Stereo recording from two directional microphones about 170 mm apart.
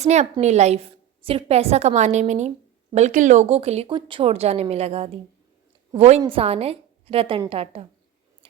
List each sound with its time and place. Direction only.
0.0 s speech: 40° right (ahead or behind)